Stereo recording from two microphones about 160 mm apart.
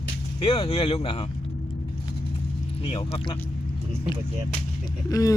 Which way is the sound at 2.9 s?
35° left (ahead or behind).